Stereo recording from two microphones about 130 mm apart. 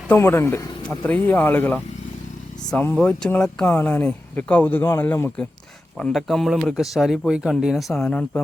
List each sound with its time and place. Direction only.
0.1 s speech: 20° left (ahead or behind)
6.0 s speech: centre (ahead or behind)